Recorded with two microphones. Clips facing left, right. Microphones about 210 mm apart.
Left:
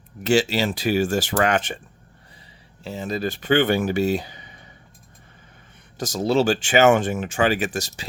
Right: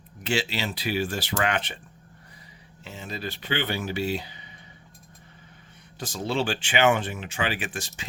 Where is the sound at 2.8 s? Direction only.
40° left (ahead or behind).